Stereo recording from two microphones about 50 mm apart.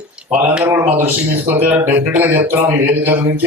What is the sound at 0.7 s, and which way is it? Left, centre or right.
A man's voice, right.